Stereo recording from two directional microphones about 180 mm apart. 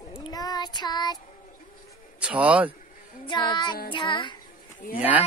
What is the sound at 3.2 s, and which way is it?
Child singing, 25° left (ahead or behind).